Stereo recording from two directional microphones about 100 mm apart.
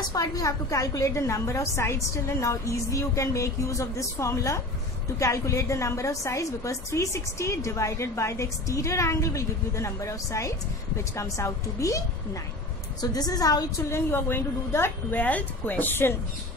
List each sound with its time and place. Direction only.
0.1 s a woman's voice: 35° left (ahead or behind)
13.0 s a woman's voice: 40° left (ahead or behind)
13.9 s a woman's voice: 25° left (ahead or behind)